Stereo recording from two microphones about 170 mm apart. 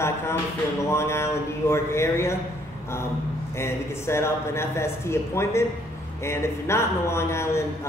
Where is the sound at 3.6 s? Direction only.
15° left (ahead or behind).